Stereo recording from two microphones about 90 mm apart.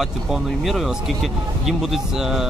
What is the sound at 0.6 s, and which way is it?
A man's voice, centre (ahead or behind).